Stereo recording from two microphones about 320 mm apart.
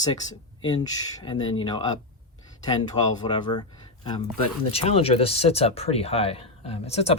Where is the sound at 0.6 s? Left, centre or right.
Centre.